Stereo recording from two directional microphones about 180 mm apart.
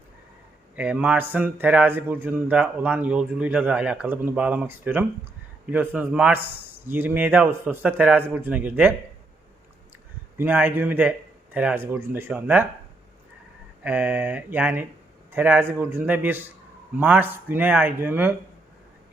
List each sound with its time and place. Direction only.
0.8 s a man's voice: 10° right (ahead or behind)
10.3 s a man's voice: 10° right (ahead or behind)
13.8 s a man's voice: 10° right (ahead or behind)